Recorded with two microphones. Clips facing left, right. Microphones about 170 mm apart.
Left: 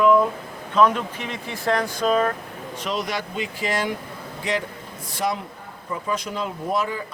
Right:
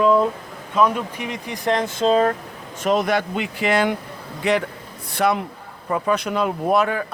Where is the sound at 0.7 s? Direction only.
10° right (ahead or behind); by 2.3 s 30° right (ahead or behind).